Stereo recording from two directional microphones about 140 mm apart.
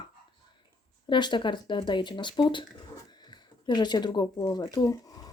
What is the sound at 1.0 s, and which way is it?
Speech, 35° left (ahead or behind).